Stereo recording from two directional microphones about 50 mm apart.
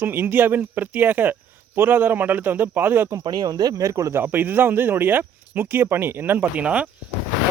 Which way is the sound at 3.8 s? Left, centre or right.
Right.